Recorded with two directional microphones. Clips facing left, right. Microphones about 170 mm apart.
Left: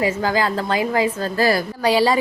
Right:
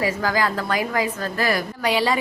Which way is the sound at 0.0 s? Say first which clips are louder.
Left 2 dB; 25° left (ahead or behind).